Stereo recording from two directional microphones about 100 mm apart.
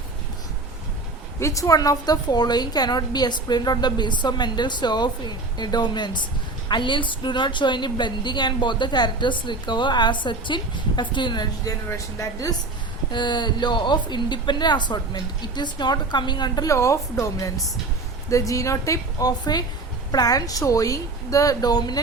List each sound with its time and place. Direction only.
1.4 s a woman's voice: 30° left (ahead or behind)
11.9 s a woman's voice: 30° left (ahead or behind)
13.1 s a woman's voice: 50° left (ahead or behind)
16.6 s a woman's voice: 30° left (ahead or behind)